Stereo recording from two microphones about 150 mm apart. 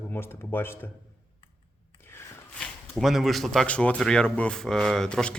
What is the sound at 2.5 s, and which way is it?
Speech, centre (ahead or behind).